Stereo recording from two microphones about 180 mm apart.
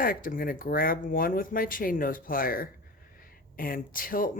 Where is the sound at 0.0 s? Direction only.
50° left (ahead or behind).